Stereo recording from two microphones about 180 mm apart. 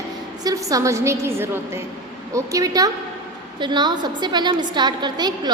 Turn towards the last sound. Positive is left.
turn(degrees=-25)  # may be behind; listen again after turning